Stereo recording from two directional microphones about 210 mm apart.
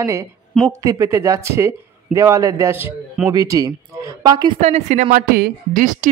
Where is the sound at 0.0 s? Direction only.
15° right (ahead or behind).